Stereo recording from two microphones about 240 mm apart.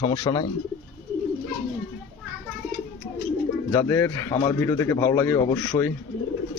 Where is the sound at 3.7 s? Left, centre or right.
Centre.